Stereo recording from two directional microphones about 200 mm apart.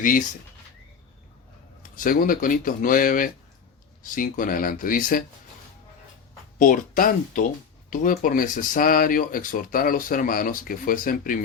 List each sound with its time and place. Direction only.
2.0 s speech: 45° left (ahead or behind)
6.6 s speech: 40° left (ahead or behind)